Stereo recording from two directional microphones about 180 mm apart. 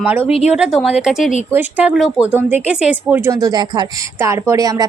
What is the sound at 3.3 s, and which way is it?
Speech, 20° right (ahead or behind).